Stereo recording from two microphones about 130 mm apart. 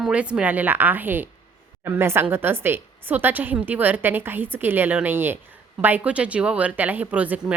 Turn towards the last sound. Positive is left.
turn(degrees=-10)  # may be behind; listen again after turning